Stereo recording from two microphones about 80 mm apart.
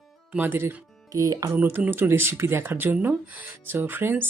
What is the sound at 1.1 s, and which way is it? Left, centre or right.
Speech, right.